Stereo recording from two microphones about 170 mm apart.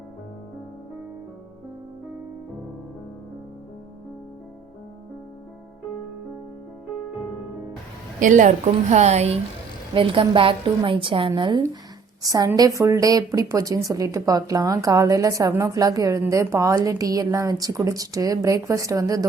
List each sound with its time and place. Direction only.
8.2 s a woman's voice: 50° right (ahead or behind); by 19.2 s 20° right (ahead or behind)